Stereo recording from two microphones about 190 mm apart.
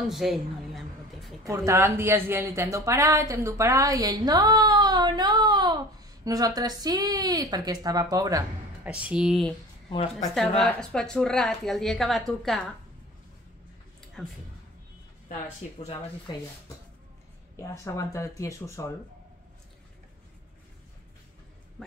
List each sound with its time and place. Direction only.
0.0 s a woman's voice: centre (ahead or behind)
1.4 s a woman's voice: 15° right (ahead or behind)
8.8 s a woman's voice: 5° right (ahead or behind)
14.2 s a woman's voice: 5° left (ahead or behind)
15.8 s speech: 30° left (ahead or behind)
17.6 s speech: 15° left (ahead or behind)
21.8 s a sound: 5° left (ahead or behind)